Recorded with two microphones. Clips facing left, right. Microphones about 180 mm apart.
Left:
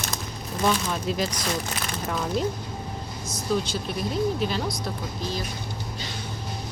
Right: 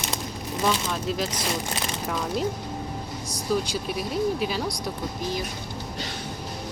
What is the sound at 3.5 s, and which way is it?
Speech, 10° right (ahead or behind).